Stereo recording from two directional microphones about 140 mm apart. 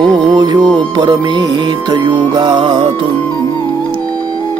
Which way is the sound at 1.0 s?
35° right (ahead or behind).